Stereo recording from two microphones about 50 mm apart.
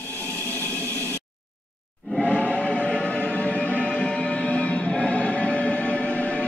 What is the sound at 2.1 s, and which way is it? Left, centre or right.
Music, left.